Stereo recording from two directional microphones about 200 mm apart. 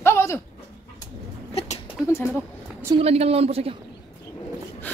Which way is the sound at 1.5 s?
30° left (ahead or behind).